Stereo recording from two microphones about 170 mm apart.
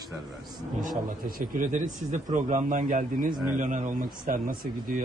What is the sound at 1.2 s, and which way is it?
Speech, 55° right (ahead or behind).